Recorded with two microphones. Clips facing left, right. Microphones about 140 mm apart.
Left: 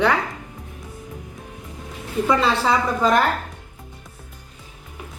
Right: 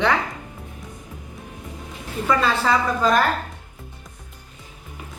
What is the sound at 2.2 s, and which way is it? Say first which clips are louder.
Speech: left 1 dB; 20° left (ahead or behind).